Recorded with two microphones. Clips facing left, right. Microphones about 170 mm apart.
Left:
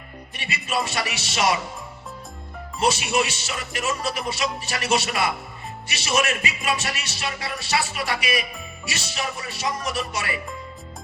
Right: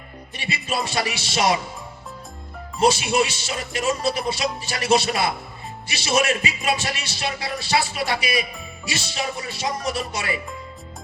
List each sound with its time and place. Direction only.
0.3 s music: 30° right (ahead or behind)
2.8 s speech: 30° right (ahead or behind)
5.9 s music: 30° right (ahead or behind)